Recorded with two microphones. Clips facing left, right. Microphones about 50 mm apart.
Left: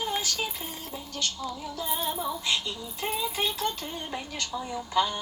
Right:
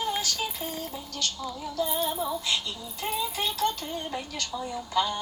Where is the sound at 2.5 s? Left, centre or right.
Left.